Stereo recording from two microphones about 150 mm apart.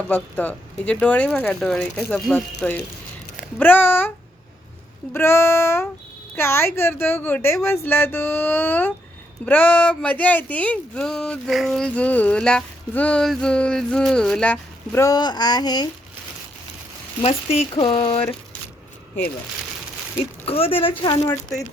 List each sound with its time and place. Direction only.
0.1 s speech: 10° left (ahead or behind)
5.1 s speech: 15° left (ahead or behind)
15.0 s a sound: 25° left (ahead or behind)
17.2 s speech: 45° left (ahead or behind)
17.7 s speech: 35° left (ahead or behind)
20.4 s speech: 40° left (ahead or behind)